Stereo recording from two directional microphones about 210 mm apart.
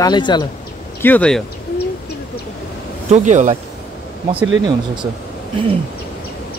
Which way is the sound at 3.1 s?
35° right (ahead or behind).